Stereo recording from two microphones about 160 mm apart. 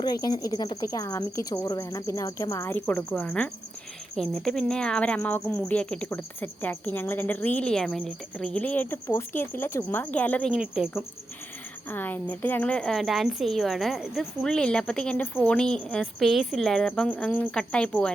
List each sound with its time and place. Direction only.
0.0 s speech: 25° left (ahead or behind); by 10.8 s centre (ahead or behind)
11.9 s a woman's voice: 10° left (ahead or behind)